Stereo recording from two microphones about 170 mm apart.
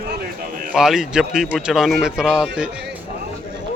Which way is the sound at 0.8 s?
5° right (ahead or behind).